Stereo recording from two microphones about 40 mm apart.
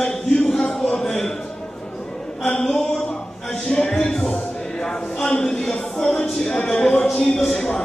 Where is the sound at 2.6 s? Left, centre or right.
Centre; by 6.9 s left.